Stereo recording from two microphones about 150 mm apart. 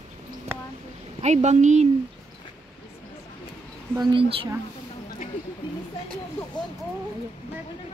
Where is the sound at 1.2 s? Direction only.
50° right (ahead or behind).